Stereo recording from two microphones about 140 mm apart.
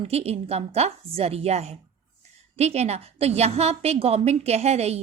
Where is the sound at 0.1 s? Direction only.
45° right (ahead or behind).